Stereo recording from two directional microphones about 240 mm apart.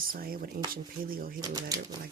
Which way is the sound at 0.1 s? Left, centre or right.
Right.